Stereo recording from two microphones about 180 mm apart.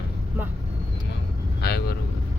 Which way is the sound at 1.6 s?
65° left (ahead or behind).